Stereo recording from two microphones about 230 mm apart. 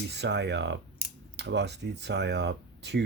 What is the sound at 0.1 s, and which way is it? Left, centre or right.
Speech, right.